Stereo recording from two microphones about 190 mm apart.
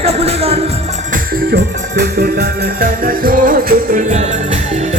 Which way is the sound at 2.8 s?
50° right (ahead or behind).